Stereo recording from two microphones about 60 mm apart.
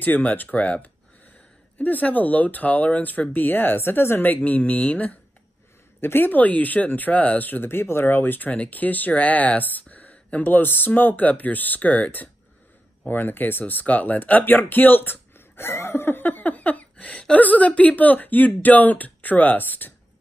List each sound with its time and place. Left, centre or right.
0.0 s speech: left
5.9 s speech: left